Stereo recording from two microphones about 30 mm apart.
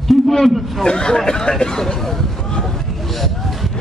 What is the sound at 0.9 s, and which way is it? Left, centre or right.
Speech, left.